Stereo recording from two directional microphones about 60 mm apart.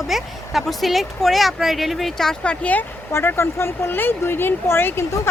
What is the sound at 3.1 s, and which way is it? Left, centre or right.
Speech, left.